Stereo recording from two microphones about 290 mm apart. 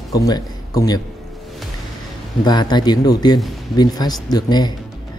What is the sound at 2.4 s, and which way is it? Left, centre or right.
Speech, centre.